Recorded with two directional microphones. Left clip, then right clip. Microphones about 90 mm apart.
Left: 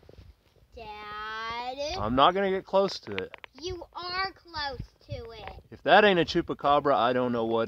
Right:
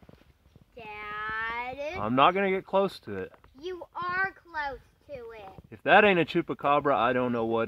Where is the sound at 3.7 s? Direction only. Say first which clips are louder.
Right 4 dB; 90° left.